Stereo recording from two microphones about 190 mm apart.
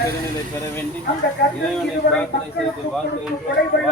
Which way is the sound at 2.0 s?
60° left (ahead or behind).